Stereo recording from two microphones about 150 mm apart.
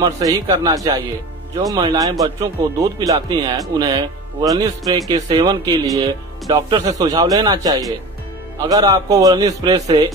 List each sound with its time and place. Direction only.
0.0 s a man's voice: 25° right (ahead or behind)